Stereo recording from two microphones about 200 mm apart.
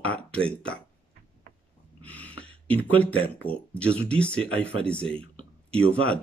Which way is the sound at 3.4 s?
5° left (ahead or behind).